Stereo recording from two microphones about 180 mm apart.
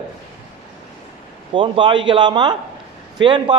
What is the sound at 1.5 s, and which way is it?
A man's voice, 25° right (ahead or behind).